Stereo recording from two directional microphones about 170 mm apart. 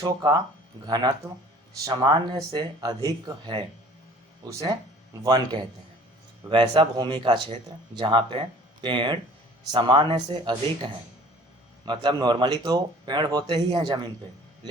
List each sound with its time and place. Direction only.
0.0 s speech: 25° right (ahead or behind)